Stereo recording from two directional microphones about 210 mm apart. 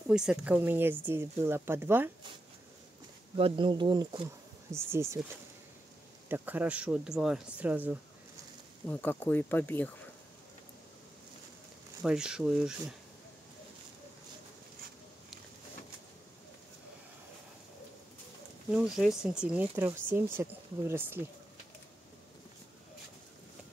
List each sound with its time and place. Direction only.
0.1 s speech: 5° right (ahead or behind)
3.3 s speech: 25° right (ahead or behind)
6.2 s speech: 10° right (ahead or behind)
8.8 s speech: 10° left (ahead or behind)
12.0 s speech: 5° right (ahead or behind)
18.7 s speech: 5° right (ahead or behind)